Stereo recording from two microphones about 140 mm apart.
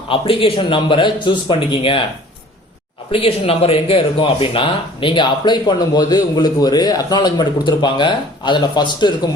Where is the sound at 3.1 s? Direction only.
40° left (ahead or behind).